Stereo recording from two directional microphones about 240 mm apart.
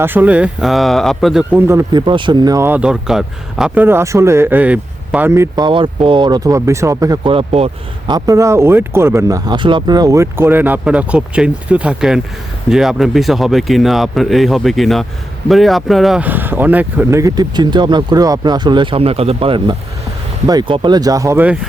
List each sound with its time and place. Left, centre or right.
0.0 s speech: centre